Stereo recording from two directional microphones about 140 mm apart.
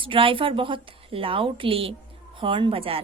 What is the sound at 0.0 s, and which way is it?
Speech, 40° right (ahead or behind).